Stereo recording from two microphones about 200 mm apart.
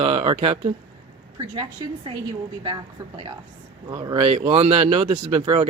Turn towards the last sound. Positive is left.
turn(degrees=-30)  # may be behind; listen again after turning